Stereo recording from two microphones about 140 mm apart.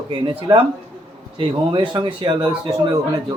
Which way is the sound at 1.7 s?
35° right (ahead or behind).